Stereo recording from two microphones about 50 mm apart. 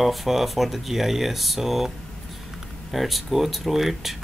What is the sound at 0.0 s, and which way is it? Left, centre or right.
Speech, centre.